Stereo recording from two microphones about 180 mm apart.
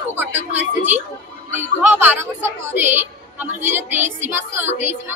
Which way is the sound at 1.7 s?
10° right (ahead or behind).